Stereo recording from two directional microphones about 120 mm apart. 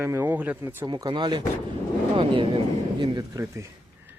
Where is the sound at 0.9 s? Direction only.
35° right (ahead or behind).